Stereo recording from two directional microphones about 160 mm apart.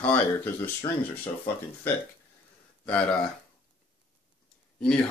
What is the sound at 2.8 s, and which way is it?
Speech, 5° left (ahead or behind).